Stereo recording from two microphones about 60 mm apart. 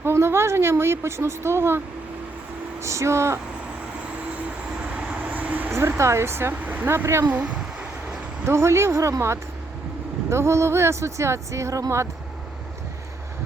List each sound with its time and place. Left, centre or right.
0.0 s speech: right
2.8 s speech: right
4.9 s vehicle: right
6.0 s speech: right
6.5 s speech: right
6.8 s speech: right
8.4 s speech: right